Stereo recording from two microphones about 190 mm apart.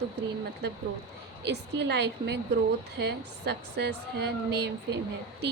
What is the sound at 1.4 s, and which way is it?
A woman's voice, 65° right (ahead or behind).